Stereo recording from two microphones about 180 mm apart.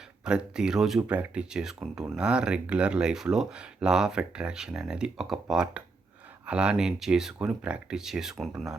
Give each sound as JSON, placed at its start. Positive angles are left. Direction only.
{"t": 0.3, "sound": "speech", "side_deg": -5}